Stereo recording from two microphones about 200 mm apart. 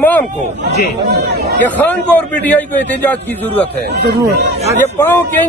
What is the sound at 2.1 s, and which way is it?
Speech, 10° left (ahead or behind).